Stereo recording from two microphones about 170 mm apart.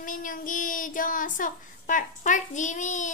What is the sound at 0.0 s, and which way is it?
Child singing, 50° left (ahead or behind).